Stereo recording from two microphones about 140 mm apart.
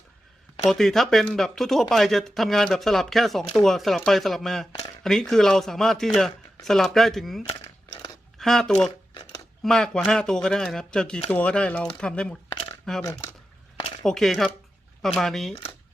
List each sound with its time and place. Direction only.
0.7 s speech: centre (ahead or behind)
13.0 s speech: 25° left (ahead or behind)
14.0 s speech: 5° left (ahead or behind)